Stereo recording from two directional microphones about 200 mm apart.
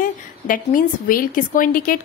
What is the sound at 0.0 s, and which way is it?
A woman's voice, 45° left (ahead or behind).